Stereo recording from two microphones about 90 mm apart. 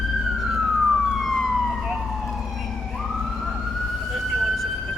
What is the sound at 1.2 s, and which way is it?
Emergency vehicle, centre (ahead or behind).